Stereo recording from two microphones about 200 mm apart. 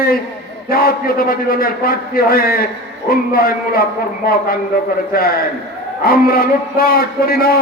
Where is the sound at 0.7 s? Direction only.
45° left (ahead or behind).